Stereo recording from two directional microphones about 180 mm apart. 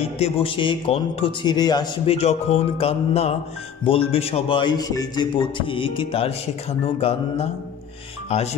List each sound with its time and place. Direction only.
0.2 s speech: 30° left (ahead or behind)
2.0 s music: 35° left (ahead or behind)
3.8 s speech: 30° left (ahead or behind)